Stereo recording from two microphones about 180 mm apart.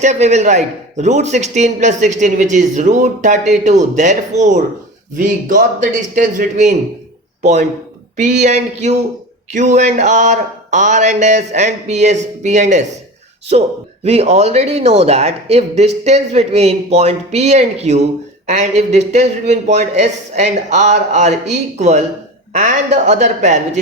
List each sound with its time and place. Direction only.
0.0 s a man's voice: 40° right (ahead or behind)